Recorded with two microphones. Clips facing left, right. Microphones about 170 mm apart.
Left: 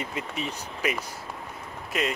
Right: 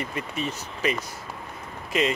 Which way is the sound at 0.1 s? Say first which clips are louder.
Right 2 dB; 90° left.